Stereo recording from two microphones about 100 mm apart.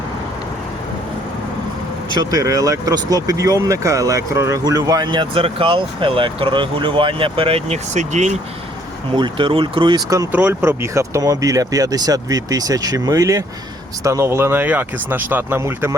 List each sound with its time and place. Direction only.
2.1 s speech: 35° right (ahead or behind); by 7.8 s 75° right (ahead or behind)
9.1 s speech: 55° right (ahead or behind)
10.6 s speech: 25° right (ahead or behind)